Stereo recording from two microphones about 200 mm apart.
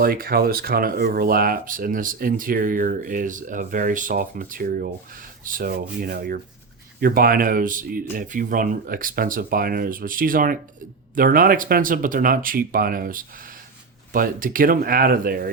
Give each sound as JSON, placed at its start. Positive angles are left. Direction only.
{"t": 0.0, "sound": "speech", "side_deg": -45}